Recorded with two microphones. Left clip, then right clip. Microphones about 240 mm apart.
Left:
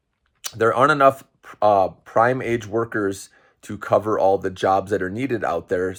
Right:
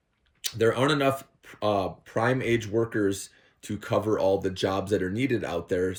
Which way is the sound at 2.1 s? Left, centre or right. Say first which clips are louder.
Left 7 dB; left.